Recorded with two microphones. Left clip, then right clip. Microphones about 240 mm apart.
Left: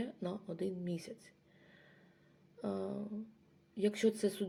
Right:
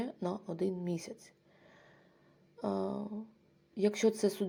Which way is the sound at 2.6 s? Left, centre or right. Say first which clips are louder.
Right 5 dB; centre.